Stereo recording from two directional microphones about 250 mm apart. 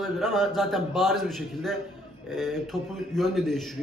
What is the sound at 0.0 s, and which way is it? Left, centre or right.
A man's voice, centre.